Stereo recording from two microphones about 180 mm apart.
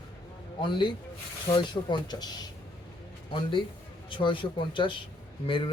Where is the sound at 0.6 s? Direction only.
25° left (ahead or behind).